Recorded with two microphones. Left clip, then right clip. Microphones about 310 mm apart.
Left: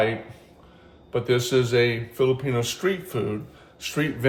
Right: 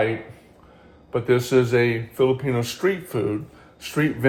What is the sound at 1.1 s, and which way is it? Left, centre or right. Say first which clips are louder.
Speech: right 3 dB; centre.